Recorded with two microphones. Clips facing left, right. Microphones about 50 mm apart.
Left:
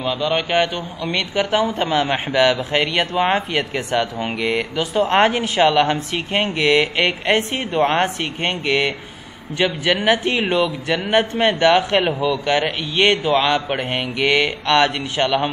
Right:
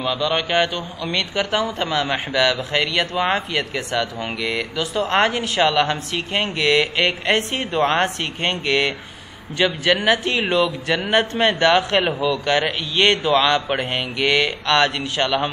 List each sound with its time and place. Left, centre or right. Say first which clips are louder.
0.0 s a man's voice: left 1 dB; centre